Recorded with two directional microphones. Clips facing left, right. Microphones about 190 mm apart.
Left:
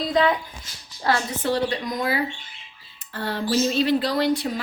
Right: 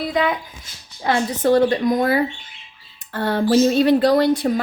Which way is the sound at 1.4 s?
45° right (ahead or behind).